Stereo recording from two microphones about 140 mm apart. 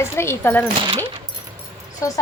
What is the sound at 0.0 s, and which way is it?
Speech, 20° left (ahead or behind).